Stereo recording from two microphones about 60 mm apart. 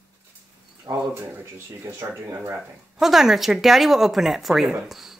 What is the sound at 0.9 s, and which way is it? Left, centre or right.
Speech, right.